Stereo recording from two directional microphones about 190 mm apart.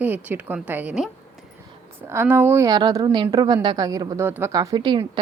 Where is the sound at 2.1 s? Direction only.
10° right (ahead or behind).